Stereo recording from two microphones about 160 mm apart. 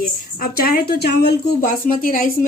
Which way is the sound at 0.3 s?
70° left (ahead or behind).